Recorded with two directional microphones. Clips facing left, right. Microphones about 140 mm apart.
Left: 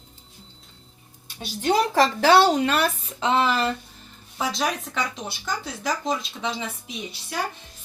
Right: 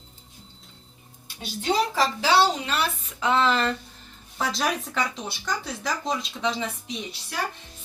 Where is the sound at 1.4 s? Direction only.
50° left (ahead or behind).